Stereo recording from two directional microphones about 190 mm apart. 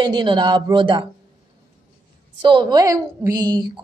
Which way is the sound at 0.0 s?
25° right (ahead or behind).